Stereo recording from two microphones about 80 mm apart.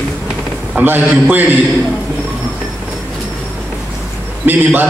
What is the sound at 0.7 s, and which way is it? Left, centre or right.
Speech, right.